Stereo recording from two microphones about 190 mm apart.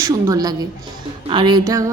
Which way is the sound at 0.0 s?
20° right (ahead or behind).